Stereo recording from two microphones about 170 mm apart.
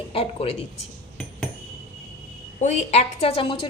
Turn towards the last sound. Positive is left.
turn(degrees=30)  # may be behind; listen again after turning